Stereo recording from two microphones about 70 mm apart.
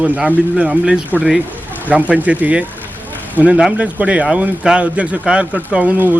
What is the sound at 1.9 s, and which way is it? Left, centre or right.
Speech, right.